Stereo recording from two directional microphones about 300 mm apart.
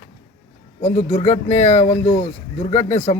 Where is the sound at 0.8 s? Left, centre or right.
Left.